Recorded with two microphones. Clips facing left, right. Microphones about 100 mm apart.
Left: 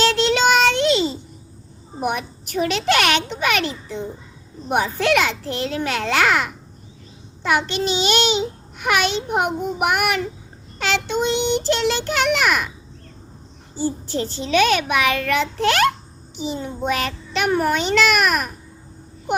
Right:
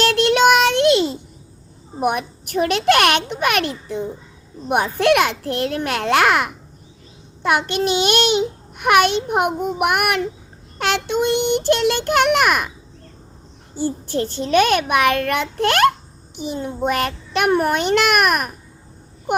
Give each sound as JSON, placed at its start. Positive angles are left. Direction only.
{"t": 0.0, "sound": "child singing", "side_deg": -55}
{"t": 2.0, "sound": "a child's voice", "side_deg": -50}
{"t": 13.7, "sound": "a child's voice", "side_deg": -55}